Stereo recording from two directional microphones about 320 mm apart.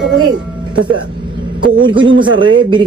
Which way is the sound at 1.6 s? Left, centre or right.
Centre.